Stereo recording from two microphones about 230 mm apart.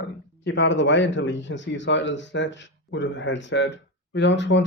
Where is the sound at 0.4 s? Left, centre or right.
Left.